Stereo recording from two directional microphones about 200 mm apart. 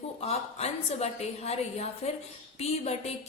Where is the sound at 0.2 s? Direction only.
30° left (ahead or behind).